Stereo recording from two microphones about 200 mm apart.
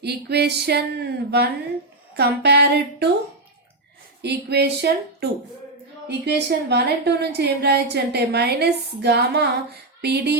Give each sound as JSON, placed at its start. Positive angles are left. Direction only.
{"t": 0.0, "sound": "a woman's voice", "side_deg": -55}
{"t": 4.2, "sound": "a woman's voice", "side_deg": -55}